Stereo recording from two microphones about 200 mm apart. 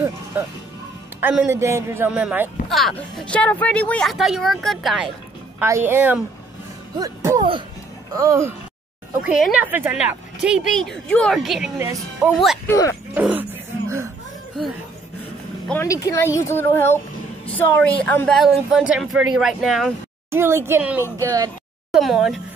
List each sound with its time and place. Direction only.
0.3 s a man's voice: 10° right (ahead or behind)
5.6 s a man's voice: 10° right (ahead or behind)
9.2 s a woman's voice: 5° right (ahead or behind)
11.8 s a man's voice: 15° right (ahead or behind)
12.6 s a woman's voice: 15° left (ahead or behind)
13.1 s a sound: 10° right (ahead or behind)
15.7 s a woman's voice: 15° left (ahead or behind); by 19.9 s centre (ahead or behind)
20.2 s a man's voice: 10° right (ahead or behind)
21.9 s a woman's voice: centre (ahead or behind)